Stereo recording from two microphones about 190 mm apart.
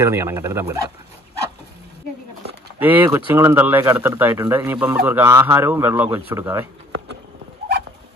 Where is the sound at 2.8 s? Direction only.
10° right (ahead or behind).